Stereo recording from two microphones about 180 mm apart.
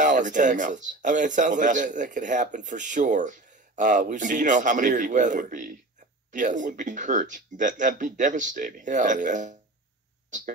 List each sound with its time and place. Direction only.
0.0 s speech: 45° right (ahead or behind)